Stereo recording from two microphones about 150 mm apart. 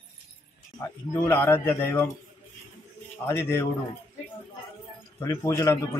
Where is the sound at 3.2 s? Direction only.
15° left (ahead or behind).